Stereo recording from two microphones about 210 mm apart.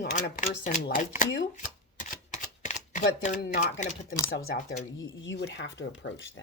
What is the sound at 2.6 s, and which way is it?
Shuffling cards, 35° left (ahead or behind).